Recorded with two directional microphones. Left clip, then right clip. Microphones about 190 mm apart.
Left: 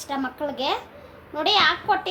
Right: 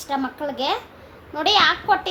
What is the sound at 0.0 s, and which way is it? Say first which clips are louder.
A woman's voice: right 2 dB; 5° right (ahead or behind).